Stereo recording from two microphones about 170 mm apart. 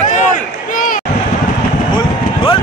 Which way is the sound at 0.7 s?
50° left (ahead or behind).